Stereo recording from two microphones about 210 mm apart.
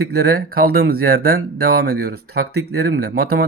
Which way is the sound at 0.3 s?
45° right (ahead or behind).